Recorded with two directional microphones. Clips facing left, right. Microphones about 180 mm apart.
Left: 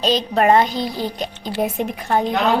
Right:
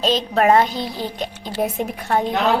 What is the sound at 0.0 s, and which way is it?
Speech, centre (ahead or behind).